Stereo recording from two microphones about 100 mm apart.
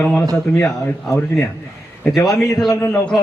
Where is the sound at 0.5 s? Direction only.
20° left (ahead or behind).